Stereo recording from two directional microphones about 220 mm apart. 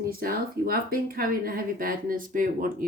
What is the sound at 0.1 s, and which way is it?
A woman's voice, 40° right (ahead or behind).